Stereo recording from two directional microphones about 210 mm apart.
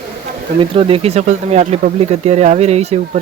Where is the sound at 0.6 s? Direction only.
25° right (ahead or behind).